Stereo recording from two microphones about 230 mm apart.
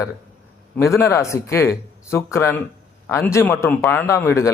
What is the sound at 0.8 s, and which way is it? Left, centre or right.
Speech, centre.